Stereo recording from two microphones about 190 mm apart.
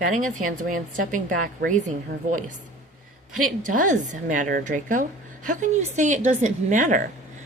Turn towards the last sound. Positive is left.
turn(degrees=-40)  # may be behind; listen again after turning